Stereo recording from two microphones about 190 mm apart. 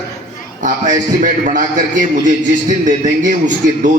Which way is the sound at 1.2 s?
40° right (ahead or behind).